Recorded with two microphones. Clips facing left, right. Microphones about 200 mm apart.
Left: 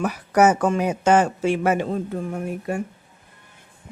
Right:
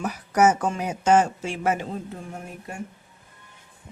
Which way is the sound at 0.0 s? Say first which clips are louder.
Left 3 dB; 60° left (ahead or behind).